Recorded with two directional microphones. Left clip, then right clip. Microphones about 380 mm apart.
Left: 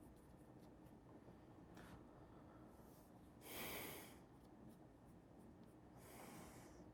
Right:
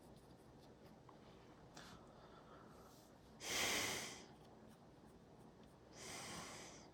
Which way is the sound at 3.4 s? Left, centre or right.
Right.